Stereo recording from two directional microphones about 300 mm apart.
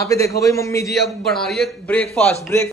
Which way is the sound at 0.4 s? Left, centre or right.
Centre.